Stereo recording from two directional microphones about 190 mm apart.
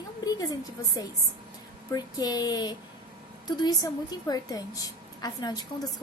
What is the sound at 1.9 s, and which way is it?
A woman's voice, 20° left (ahead or behind).